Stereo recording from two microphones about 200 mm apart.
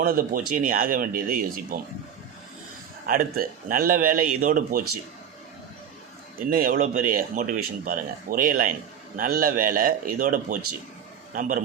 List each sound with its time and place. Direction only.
0.0 s speech: 45° right (ahead or behind)
3.1 s speech: 45° right (ahead or behind)
6.5 s a man's voice: 45° right (ahead or behind)